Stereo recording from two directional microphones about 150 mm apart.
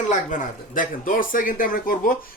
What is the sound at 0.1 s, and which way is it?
Speech, 60° left (ahead or behind).